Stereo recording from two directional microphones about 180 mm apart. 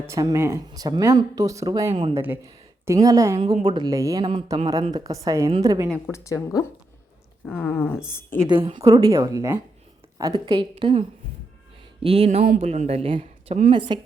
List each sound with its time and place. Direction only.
0.1 s speech: 15° right (ahead or behind)
1.9 s speech: 30° right (ahead or behind)
2.1 s a woman's voice: 10° right (ahead or behind)
3.3 s speech: 30° right (ahead or behind)
6.1 s speech: 15° left (ahead or behind)
7.4 s speech: 5° left (ahead or behind)
8.4 s speech: 25° right (ahead or behind)
12.0 s speech: 35° right (ahead or behind)